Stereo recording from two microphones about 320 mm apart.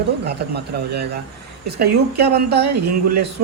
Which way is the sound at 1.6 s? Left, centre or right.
Right.